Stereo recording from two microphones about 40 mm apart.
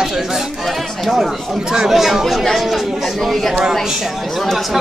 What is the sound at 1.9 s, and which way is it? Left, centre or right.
Speech, centre.